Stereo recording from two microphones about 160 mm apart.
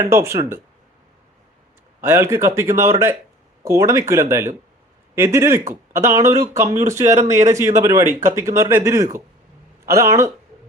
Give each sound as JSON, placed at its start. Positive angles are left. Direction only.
{"t": 0.0, "sound": "speech", "side_deg": -15}
{"t": 2.0, "sound": "speech", "side_deg": -15}
{"t": 7.3, "sound": "speech", "side_deg": -50}
{"t": 7.5, "sound": "speech", "side_deg": -20}